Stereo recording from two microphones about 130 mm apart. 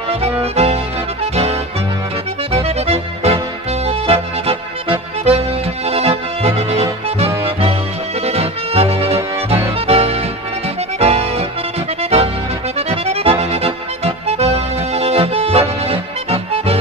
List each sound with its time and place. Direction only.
0.1 s music: 50° right (ahead or behind)